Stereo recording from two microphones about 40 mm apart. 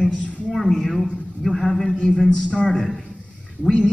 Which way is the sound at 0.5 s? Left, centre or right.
Centre.